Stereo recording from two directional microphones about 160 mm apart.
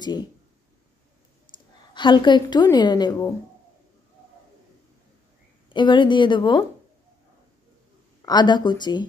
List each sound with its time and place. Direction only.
1.5 s a sound: 30° left (ahead or behind)
2.0 s a woman's voice: 30° left (ahead or behind)
5.7 s a woman's voice: 30° left (ahead or behind)
8.3 s a woman's voice: 25° left (ahead or behind)